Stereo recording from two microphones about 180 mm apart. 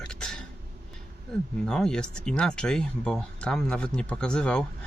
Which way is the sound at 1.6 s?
5° left (ahead or behind).